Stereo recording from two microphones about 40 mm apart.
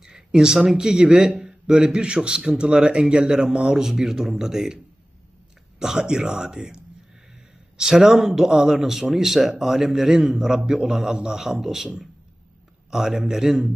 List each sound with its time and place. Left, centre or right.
0.0 s a sound: centre
0.7 s a man's voice: centre
3.8 s a man's voice: centre
5.8 s a man's voice: centre
7.8 s a man's voice: centre
12.9 s a man's voice: centre